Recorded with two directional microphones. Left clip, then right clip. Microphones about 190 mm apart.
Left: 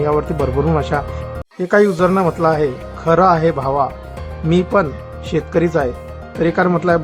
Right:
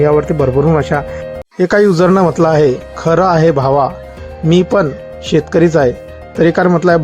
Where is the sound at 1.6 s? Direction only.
30° right (ahead or behind).